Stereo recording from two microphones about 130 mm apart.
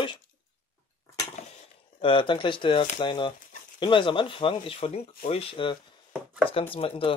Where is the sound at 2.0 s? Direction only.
40° left (ahead or behind).